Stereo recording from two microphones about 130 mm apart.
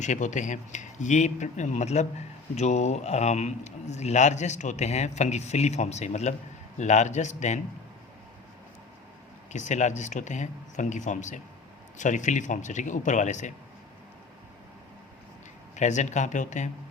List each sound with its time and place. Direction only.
0.0 s a man's voice: 70° left (ahead or behind)
9.5 s speech: 65° left (ahead or behind)
15.7 s speech: 65° left (ahead or behind)